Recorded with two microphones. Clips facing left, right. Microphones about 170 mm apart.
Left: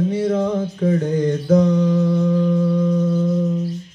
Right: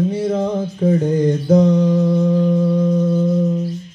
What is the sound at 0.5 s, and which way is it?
Mantra, 25° right (ahead or behind).